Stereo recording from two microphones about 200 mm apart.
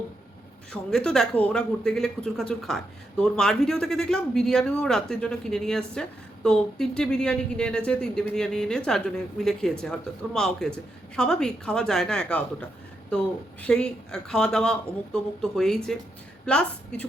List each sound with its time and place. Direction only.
0.7 s speech: 5° left (ahead or behind)